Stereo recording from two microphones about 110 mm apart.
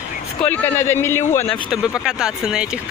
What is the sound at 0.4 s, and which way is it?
Speech, 15° left (ahead or behind).